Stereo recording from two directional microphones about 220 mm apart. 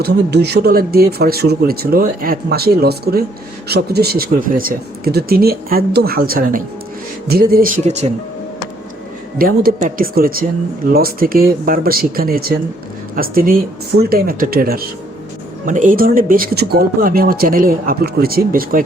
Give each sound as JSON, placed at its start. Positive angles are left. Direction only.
{"t": 0.0, "sound": "speech", "side_deg": -50}
{"t": 9.4, "sound": "speech", "side_deg": -40}